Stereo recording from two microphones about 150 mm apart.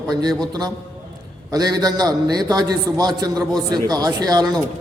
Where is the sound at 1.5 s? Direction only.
25° right (ahead or behind).